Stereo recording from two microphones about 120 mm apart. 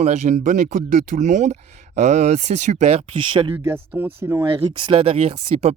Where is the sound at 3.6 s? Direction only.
20° right (ahead or behind).